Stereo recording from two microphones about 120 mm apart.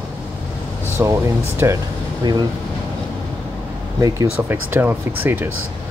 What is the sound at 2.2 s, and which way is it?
Speech, 35° right (ahead or behind).